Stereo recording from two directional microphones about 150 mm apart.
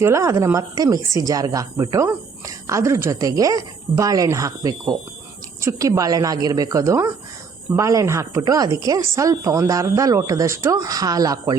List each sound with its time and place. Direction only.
0.0 s speech: 20° right (ahead or behind)